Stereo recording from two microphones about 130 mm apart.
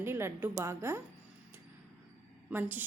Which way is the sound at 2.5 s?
15° right (ahead or behind).